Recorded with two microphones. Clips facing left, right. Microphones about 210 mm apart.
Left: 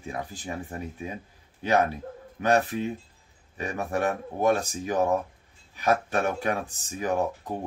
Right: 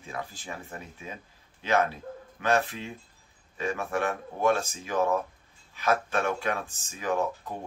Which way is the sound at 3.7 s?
40° left (ahead or behind).